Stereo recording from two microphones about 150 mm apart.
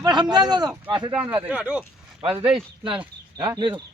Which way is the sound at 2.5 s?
35° right (ahead or behind).